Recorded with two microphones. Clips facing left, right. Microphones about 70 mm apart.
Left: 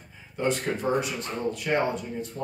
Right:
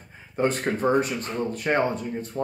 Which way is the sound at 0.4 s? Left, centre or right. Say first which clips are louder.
Right 3 dB; right.